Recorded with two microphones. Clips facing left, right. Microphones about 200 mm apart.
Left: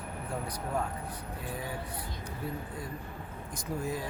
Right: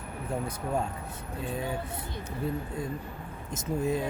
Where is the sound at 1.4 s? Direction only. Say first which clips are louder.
Right 6 dB; 25° right (ahead or behind).